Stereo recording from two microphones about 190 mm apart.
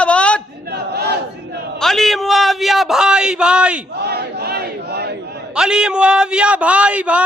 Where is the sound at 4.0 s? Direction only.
60° right (ahead or behind).